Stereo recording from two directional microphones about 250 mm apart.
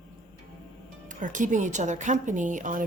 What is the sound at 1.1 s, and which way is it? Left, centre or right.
A woman's voice, right.